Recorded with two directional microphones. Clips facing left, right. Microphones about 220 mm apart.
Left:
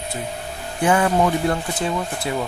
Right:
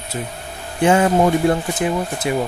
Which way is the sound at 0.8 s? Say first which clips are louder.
Right 3 dB; 25° right (ahead or behind).